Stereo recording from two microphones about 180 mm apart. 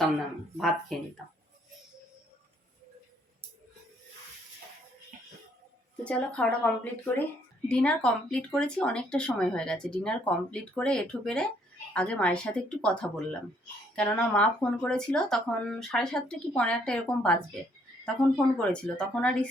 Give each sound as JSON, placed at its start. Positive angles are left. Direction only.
{"t": 0.5, "sound": "speech", "side_deg": 0}
{"t": 5.1, "sound": "a sound", "side_deg": -50}
{"t": 6.1, "sound": "speech", "side_deg": 5}